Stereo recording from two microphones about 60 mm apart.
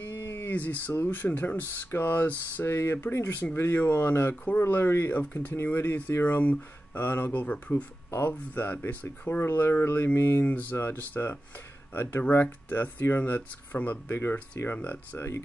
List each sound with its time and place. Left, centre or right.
0.0 s a sound: left
1.1 s speech: left
7.0 s speech: left
7.7 s speech: left
8.3 s speech: left
10.4 s speech: left